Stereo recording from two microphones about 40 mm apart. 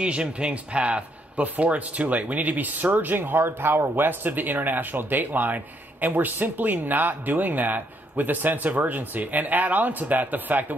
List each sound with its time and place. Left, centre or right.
0.0 s speech: right